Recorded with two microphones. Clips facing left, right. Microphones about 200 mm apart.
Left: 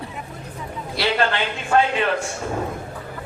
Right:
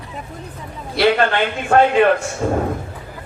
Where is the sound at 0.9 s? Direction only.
55° right (ahead or behind).